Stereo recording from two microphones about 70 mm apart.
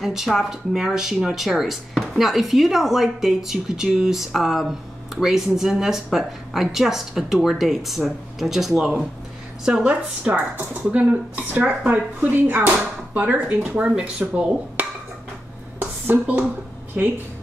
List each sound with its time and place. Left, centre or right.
0.0 s speech: centre
15.8 s a sound: right
17.0 s speech: right